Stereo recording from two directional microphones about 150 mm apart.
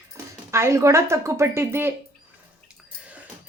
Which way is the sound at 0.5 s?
20° right (ahead or behind).